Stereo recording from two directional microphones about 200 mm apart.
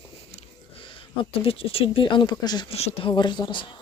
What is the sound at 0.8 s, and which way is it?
Speech, 25° left (ahead or behind).